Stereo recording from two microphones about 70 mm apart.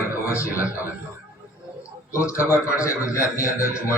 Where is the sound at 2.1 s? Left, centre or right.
Left.